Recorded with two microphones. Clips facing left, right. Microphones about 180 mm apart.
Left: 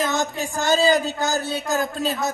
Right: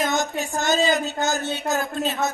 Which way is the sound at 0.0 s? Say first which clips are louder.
Even; 35° left (ahead or behind).